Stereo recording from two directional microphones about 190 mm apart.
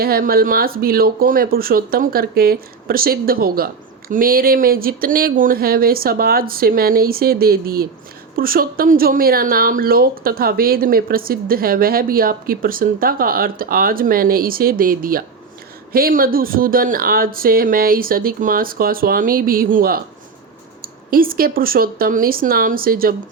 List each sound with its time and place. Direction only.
0.0 s speech: 50° right (ahead or behind)